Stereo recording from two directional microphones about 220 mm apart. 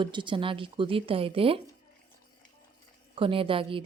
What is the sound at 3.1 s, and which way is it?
Speech, 25° right (ahead or behind).